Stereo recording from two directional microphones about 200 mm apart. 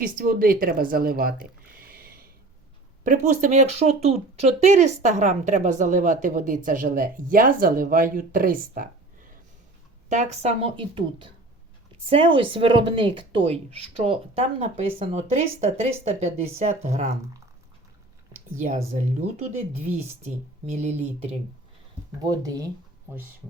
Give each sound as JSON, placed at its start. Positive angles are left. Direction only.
{"t": 0.0, "sound": "a woman's voice", "side_deg": -45}
{"t": 10.1, "sound": "speech", "side_deg": -35}
{"t": 18.5, "sound": "speech", "side_deg": -40}
{"t": 20.7, "sound": "speech", "side_deg": -35}
{"t": 22.2, "sound": "speech", "side_deg": -15}